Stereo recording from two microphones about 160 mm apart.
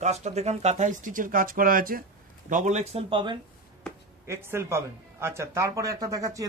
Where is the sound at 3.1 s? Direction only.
30° right (ahead or behind).